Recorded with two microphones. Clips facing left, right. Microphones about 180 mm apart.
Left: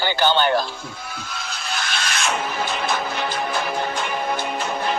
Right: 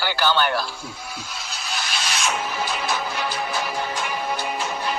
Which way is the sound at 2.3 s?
55° left (ahead or behind).